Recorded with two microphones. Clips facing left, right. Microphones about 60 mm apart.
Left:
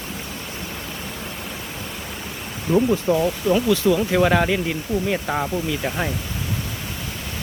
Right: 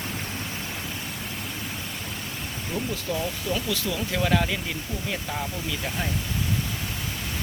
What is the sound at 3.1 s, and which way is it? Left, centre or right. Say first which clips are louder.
Speech: left 7 dB; left.